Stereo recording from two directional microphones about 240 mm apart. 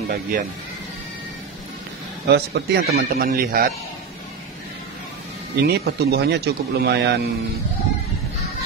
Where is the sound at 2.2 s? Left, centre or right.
Right.